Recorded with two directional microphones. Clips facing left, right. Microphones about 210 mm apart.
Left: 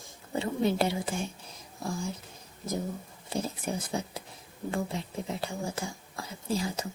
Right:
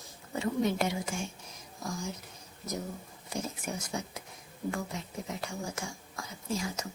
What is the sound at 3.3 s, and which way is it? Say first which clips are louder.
Speech: left 4 dB; 30° left (ahead or behind).